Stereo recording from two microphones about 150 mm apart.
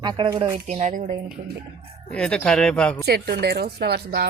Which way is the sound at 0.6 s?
50° right (ahead or behind).